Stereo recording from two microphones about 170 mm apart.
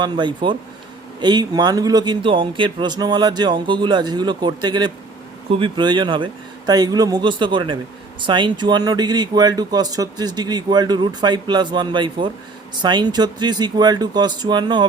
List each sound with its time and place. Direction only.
0.0 s speech: 25° right (ahead or behind)